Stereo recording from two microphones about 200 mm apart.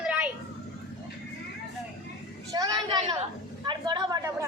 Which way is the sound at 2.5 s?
20° right (ahead or behind).